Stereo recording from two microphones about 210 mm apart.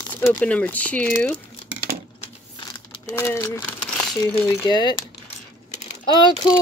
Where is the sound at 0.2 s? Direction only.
5° left (ahead or behind).